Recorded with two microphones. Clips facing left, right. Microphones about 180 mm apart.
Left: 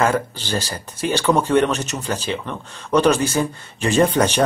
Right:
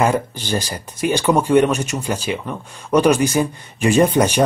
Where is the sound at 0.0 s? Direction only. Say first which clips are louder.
Right 1 dB; 15° right (ahead or behind).